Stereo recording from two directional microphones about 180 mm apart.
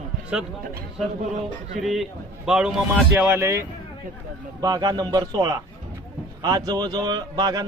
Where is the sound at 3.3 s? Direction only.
15° right (ahead or behind).